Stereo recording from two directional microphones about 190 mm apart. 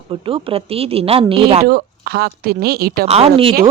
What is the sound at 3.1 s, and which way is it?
Speech, 30° right (ahead or behind).